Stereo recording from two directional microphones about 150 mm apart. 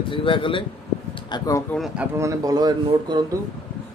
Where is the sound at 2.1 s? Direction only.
20° right (ahead or behind).